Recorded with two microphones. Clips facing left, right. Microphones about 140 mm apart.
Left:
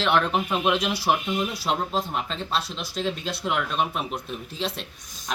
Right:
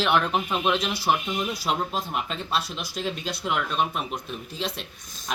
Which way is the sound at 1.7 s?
5° right (ahead or behind).